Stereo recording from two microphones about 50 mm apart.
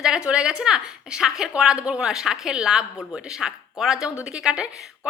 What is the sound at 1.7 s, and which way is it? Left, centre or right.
A woman's voice, right.